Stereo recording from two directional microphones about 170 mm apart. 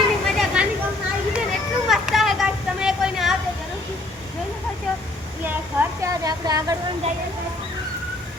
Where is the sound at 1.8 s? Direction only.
Centre (ahead or behind).